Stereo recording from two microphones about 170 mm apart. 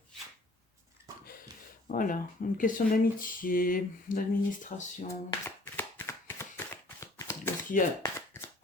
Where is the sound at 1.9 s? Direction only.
50° left (ahead or behind).